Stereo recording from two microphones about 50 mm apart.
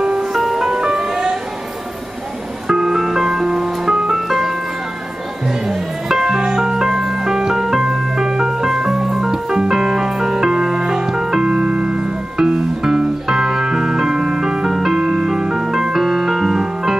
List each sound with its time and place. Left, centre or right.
0.0 s music: centre
2.7 s music: centre
5.7 s music: centre